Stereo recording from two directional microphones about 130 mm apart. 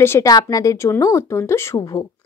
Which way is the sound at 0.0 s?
20° left (ahead or behind).